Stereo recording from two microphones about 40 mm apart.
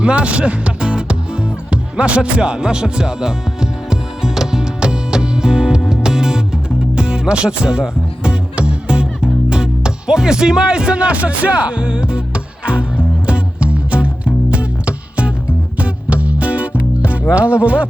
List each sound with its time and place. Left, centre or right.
0.0 s music: right
17.2 s speech: right